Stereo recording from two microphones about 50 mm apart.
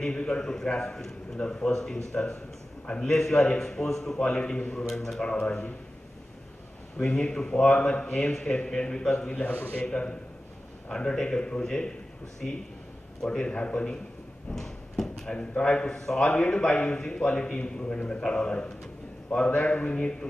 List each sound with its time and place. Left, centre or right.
0.0 s a man's voice: centre
5.2 s a man's voice: centre
7.0 s a man's voice: centre
9.3 s a man's voice: left
9.8 s a man's voice: centre
13.2 s a man's voice: centre
14.5 s a sound: centre
15.3 s a man's voice: left